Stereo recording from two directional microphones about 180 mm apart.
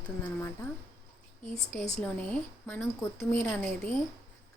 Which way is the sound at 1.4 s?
40° left (ahead or behind).